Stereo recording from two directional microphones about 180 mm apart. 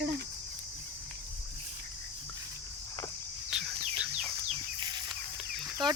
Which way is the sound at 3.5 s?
5° right (ahead or behind).